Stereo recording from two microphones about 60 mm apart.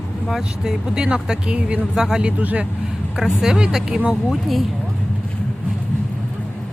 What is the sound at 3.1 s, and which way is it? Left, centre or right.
Speech, centre.